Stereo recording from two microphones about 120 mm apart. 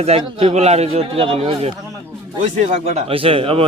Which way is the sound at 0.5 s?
65° right (ahead or behind).